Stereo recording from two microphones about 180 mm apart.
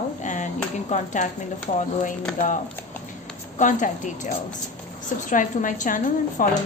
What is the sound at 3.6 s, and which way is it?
A woman's voice, 45° left (ahead or behind).